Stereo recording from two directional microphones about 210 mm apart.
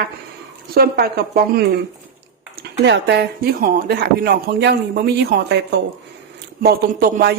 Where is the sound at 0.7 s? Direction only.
45° right (ahead or behind).